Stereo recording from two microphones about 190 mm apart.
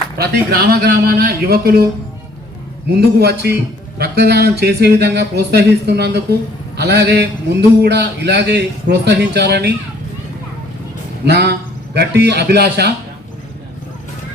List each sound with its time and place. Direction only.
0.2 s a man's voice: 55° right (ahead or behind)
2.9 s a man's voice: 55° right (ahead or behind)
11.3 s a man's voice: 60° right (ahead or behind)